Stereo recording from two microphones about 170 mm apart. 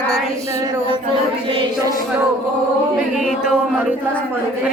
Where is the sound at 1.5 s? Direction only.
30° right (ahead or behind).